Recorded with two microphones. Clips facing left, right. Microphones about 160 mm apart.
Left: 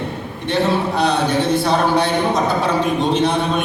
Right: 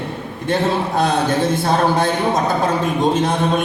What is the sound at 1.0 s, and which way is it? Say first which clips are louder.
Speech: right 2 dB; 50° right (ahead or behind).